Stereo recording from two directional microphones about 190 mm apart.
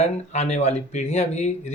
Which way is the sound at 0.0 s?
35° left (ahead or behind).